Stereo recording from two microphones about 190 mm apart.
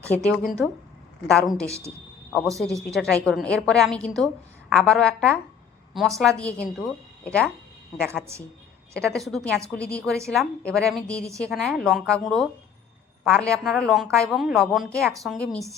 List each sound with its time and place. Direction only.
0.0 s a man's voice: 5° left (ahead or behind)
1.6 s a woman's voice: 15° right (ahead or behind)
2.8 s a man's voice: 5° left (ahead or behind)